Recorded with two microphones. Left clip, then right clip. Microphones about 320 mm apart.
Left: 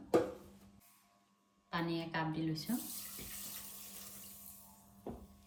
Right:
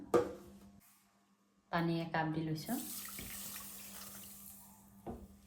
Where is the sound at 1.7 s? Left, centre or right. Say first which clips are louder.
Right 2 dB; right.